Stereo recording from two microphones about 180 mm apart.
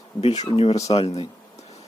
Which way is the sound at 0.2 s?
35° left (ahead or behind).